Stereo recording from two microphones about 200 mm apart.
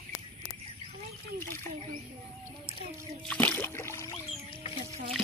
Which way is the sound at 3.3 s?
10° left (ahead or behind).